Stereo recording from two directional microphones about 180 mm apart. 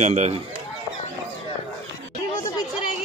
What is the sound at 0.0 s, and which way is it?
Speech, 40° right (ahead or behind).